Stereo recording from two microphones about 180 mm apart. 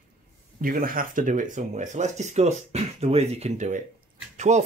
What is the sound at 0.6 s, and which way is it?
Speech, 50° right (ahead or behind).